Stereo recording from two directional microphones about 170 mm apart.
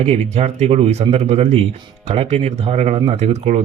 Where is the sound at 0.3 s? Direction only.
40° right (ahead or behind).